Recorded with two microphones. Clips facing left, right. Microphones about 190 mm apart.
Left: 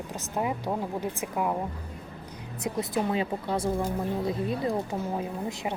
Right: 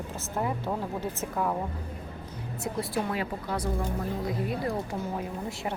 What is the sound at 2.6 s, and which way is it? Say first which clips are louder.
Speech: left 2 dB; 20° left (ahead or behind).